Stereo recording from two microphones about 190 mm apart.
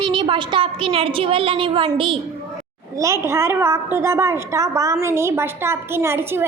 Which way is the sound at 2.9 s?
15° right (ahead or behind).